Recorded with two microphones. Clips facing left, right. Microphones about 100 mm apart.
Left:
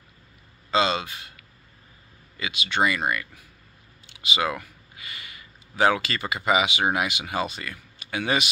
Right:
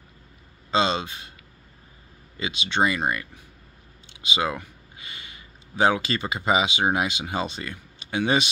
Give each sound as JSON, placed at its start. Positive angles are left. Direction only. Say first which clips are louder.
{"t": 0.7, "sound": "speech", "louder": "even", "side_deg": -25}
{"t": 2.3, "sound": "speech", "louder": "right 1 dB", "side_deg": -25}